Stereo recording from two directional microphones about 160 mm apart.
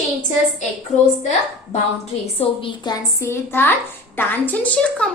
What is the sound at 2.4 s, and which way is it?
A woman's voice, 30° left (ahead or behind).